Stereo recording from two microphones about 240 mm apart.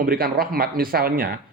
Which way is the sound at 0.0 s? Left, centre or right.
Right.